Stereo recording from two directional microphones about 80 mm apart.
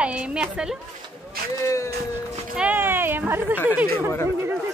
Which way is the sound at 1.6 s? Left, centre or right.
Left.